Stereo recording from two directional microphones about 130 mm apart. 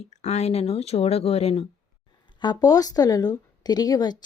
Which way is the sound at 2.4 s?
30° left (ahead or behind).